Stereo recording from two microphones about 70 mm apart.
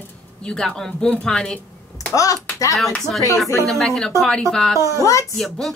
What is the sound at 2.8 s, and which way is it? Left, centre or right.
Speech, centre.